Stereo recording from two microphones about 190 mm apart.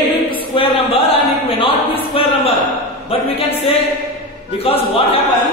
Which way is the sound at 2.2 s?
30° left (ahead or behind).